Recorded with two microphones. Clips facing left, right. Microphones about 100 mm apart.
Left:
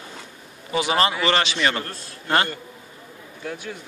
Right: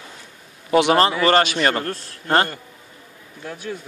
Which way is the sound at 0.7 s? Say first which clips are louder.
Right 7 dB; 65° right (ahead or behind).